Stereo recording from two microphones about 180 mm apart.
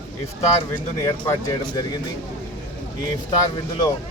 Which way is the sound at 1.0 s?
15° left (ahead or behind).